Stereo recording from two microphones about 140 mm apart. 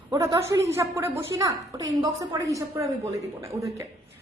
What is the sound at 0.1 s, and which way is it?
A woman's voice, 25° right (ahead or behind).